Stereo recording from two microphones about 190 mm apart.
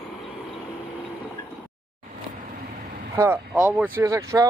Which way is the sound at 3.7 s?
10° right (ahead or behind).